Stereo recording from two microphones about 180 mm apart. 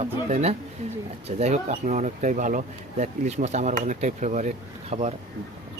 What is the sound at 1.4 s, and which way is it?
Speech, 40° right (ahead or behind).